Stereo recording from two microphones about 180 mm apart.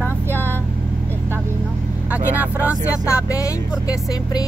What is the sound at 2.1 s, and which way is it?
Vehicle, 10° right (ahead or behind).